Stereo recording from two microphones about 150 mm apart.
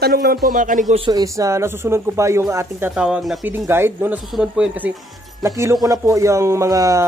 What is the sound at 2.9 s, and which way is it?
Speech, 5° right (ahead or behind).